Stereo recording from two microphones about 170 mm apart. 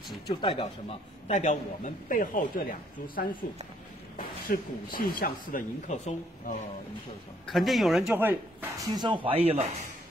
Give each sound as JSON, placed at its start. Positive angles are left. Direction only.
{"t": 0.3, "sound": "a man's voice", "side_deg": 30}
{"t": 4.2, "sound": "speech", "side_deg": 55}
{"t": 5.9, "sound": "speech", "side_deg": 40}
{"t": 7.4, "sound": "speech", "side_deg": 0}